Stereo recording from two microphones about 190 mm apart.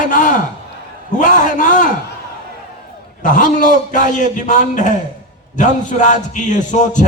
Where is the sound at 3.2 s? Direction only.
45° left (ahead or behind).